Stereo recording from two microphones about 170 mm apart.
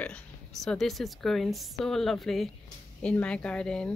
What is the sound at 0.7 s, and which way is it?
A woman's voice, centre (ahead or behind).